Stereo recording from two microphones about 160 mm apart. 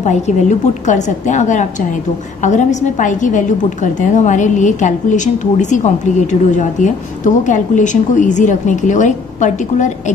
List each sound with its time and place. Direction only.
0.0 s a woman's voice: 50° left (ahead or behind)